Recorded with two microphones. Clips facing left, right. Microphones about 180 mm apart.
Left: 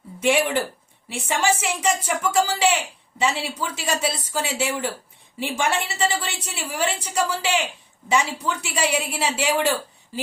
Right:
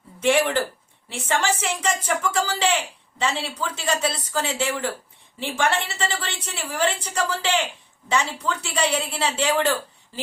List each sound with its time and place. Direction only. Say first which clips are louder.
0.2 s a woman's voice: even; 10° left (ahead or behind)